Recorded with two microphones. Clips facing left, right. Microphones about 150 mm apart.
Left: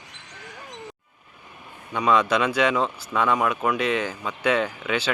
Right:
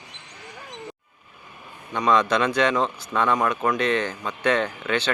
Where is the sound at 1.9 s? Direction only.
10° left (ahead or behind).